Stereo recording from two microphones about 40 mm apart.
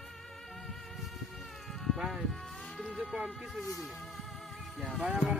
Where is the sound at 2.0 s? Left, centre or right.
Centre.